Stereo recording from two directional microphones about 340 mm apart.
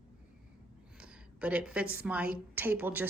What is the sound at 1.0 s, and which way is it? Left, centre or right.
A woman's voice, centre.